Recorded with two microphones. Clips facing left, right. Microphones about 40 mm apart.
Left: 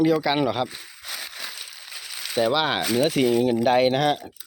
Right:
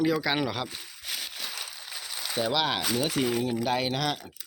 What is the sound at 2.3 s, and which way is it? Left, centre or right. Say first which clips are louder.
Speech: left 6 dB; left.